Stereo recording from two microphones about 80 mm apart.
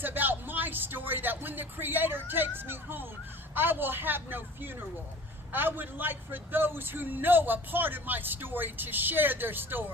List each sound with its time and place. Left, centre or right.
0.0 s a man's voice: right